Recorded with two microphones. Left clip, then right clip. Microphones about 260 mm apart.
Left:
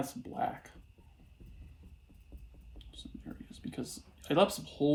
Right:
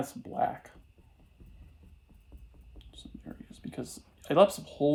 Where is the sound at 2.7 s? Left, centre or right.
Right.